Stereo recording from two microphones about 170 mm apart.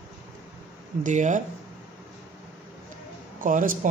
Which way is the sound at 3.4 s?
50° right (ahead or behind).